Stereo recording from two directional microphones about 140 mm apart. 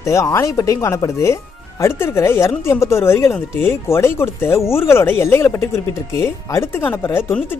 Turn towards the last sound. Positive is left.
turn(degrees=15)  # may be behind; listen again after turning